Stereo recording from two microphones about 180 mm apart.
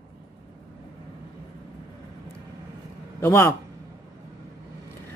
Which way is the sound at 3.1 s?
15° left (ahead or behind).